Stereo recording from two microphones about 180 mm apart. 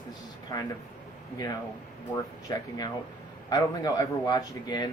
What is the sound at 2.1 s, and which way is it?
A man's voice, 20° left (ahead or behind).